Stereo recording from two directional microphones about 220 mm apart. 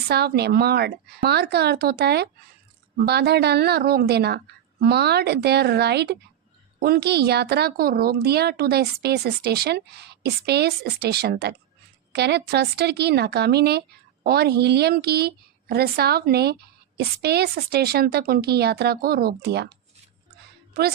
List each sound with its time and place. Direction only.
0.1 s speech: 45° right (ahead or behind)